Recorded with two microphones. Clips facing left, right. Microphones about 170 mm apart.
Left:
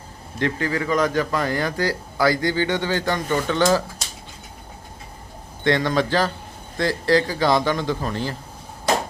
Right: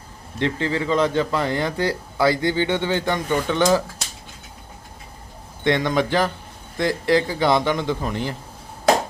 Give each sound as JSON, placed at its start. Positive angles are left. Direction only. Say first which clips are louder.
{"t": 0.3, "sound": "speech", "louder": "right 1 dB", "side_deg": -25}
{"t": 5.6, "sound": "speech", "louder": "even", "side_deg": -20}